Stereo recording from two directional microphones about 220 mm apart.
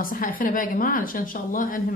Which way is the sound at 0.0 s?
40° left (ahead or behind).